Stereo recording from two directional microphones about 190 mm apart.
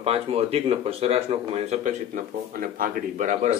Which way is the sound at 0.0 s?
30° right (ahead or behind).